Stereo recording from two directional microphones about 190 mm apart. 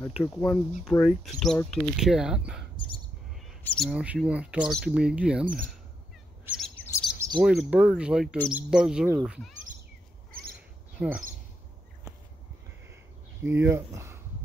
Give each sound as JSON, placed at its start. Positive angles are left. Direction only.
{"t": 0.2, "sound": "speech", "side_deg": 5}
{"t": 6.4, "sound": "chirp", "side_deg": -5}
{"t": 7.2, "sound": "cricket", "side_deg": -20}
{"t": 7.4, "sound": "speech", "side_deg": -5}
{"t": 11.0, "sound": "speech", "side_deg": -5}
{"t": 13.4, "sound": "speech", "side_deg": -10}